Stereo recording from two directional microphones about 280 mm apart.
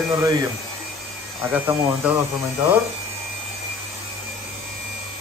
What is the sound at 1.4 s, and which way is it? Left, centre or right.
Speech, centre.